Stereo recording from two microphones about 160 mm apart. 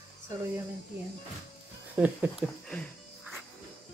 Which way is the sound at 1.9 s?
10° right (ahead or behind).